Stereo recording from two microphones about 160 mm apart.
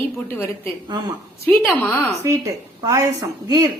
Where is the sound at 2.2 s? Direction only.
20° right (ahead or behind).